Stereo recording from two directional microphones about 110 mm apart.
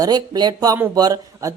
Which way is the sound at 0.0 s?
40° right (ahead or behind).